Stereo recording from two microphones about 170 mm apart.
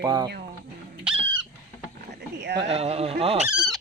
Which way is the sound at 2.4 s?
90° right.